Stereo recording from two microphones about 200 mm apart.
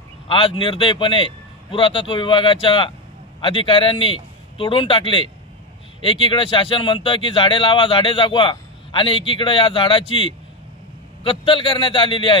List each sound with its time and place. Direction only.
0.3 s a man's voice: 25° left (ahead or behind)